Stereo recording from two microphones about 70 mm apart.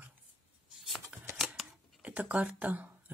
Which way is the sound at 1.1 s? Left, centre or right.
Right.